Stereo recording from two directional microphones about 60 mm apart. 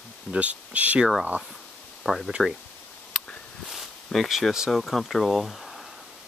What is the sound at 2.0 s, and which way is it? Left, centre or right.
Speech, centre.